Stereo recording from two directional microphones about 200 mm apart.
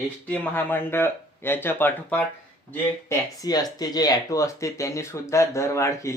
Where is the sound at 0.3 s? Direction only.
10° left (ahead or behind).